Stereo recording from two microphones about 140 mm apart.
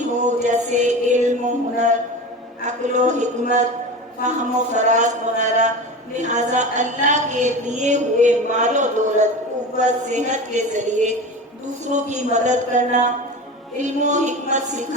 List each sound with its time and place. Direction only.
0.2 s music: 60° right (ahead or behind)
2.6 s a man's voice: 60° right (ahead or behind)
4.3 s a woman's voice: 60° right (ahead or behind)